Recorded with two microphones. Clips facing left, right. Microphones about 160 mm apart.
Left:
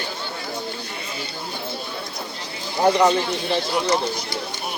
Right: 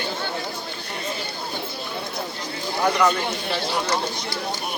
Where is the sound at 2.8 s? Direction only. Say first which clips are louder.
Left 4 dB; 30° left (ahead or behind).